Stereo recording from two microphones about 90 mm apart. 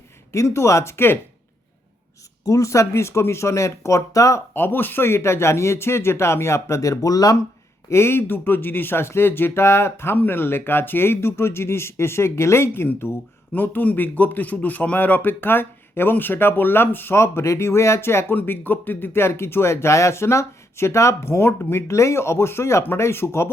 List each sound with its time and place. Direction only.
0.3 s speech: 35° left (ahead or behind)
2.4 s speech: 35° left (ahead or behind)
7.9 s speech: 30° left (ahead or behind)